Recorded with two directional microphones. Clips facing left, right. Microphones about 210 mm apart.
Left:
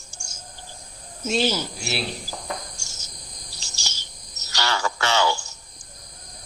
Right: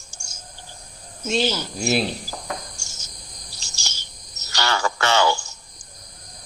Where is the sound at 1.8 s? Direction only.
45° right (ahead or behind).